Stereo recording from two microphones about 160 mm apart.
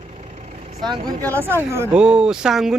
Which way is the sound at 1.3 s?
15° right (ahead or behind).